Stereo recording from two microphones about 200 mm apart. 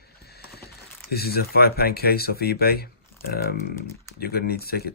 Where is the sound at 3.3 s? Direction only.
50° left (ahead or behind).